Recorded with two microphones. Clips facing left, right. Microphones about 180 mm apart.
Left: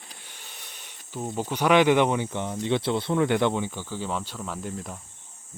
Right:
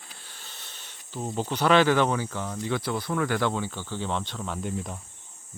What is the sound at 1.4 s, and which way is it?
Speech, 10° left (ahead or behind).